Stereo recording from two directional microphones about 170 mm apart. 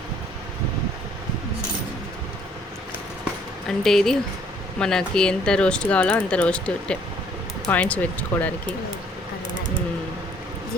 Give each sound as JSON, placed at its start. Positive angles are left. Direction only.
{"t": 3.7, "sound": "speech", "side_deg": 0}